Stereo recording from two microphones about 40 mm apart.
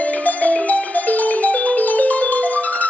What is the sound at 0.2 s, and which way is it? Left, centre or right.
Music, left.